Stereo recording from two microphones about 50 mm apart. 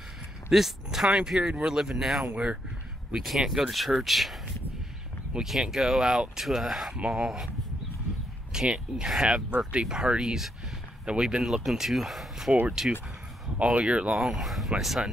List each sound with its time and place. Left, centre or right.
0.5 s speech: centre
5.3 s speech: centre
13.6 s speech: right
14.4 s speech: centre